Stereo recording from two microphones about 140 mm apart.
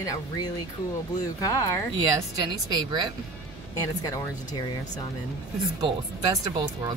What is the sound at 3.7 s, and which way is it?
Speech, 25° left (ahead or behind).